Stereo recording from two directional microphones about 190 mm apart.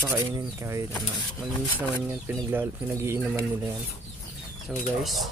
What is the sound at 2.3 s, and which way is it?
Speech, 10° right (ahead or behind).